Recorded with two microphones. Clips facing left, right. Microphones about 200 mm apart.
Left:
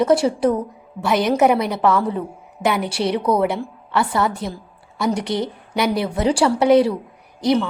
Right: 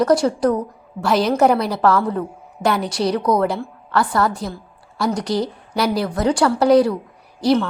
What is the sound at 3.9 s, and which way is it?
A woman's voice, 25° left (ahead or behind).